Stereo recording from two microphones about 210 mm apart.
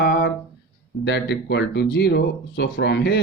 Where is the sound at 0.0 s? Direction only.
55° left (ahead or behind).